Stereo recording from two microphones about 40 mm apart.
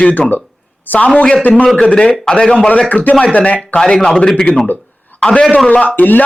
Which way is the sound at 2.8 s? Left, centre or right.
Left.